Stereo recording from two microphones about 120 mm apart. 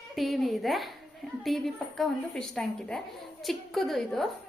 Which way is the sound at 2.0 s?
5° left (ahead or behind).